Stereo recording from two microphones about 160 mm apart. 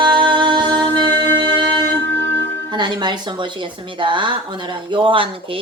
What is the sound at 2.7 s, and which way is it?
Speech, 30° right (ahead or behind).